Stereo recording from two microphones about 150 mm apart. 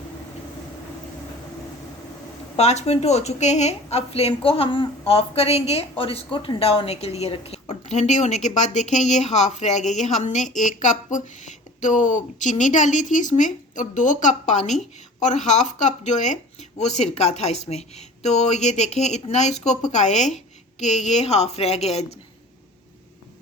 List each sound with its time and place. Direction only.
2.6 s a woman's voice: 50° left (ahead or behind)